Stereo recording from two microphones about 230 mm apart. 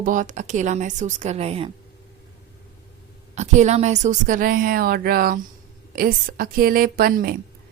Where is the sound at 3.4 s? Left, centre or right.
Right.